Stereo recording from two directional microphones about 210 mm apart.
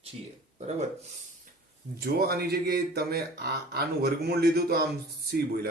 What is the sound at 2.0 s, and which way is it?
Speech, 45° right (ahead or behind).